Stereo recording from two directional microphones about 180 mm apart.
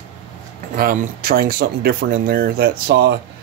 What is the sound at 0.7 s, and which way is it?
Speech, 55° right (ahead or behind).